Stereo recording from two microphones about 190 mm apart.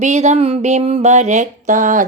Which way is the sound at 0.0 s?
35° right (ahead or behind).